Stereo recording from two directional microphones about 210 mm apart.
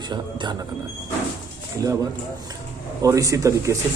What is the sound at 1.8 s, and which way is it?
A man's voice, 15° right (ahead or behind).